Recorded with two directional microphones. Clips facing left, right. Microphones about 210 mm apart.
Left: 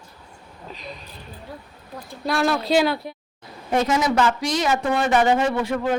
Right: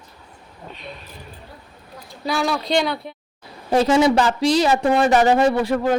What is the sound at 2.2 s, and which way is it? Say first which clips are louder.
Speech: left 1 dB; centre (ahead or behind).